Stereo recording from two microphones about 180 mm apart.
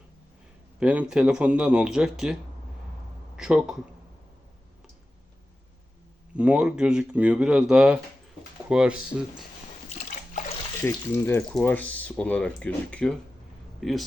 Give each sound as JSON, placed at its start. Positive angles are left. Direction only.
{"t": 0.8, "sound": "speech", "side_deg": -5}
{"t": 6.3, "sound": "speech", "side_deg": -5}
{"t": 9.9, "sound": "water", "side_deg": 40}
{"t": 10.8, "sound": "speech", "side_deg": 10}